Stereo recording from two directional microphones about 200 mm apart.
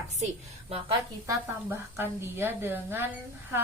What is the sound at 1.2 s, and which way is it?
A woman's voice, 10° right (ahead or behind).